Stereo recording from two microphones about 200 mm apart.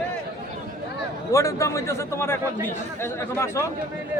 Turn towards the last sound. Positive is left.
turn(degrees=15)  # may be behind; listen again after turning